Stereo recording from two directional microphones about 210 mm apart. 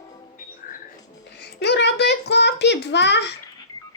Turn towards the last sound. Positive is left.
turn(degrees=55)  # may be behind; listen again after turning